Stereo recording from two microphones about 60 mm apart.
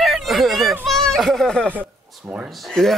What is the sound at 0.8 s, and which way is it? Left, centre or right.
Speech, centre.